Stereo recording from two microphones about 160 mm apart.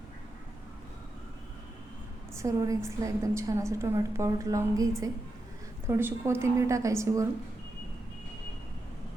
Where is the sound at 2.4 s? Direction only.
20° right (ahead or behind).